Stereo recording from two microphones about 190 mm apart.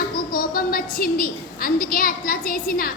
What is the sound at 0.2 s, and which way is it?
A woman's voice, 50° left (ahead or behind).